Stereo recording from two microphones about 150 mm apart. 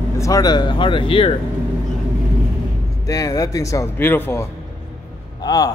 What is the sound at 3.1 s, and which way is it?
Speech, 25° left (ahead or behind).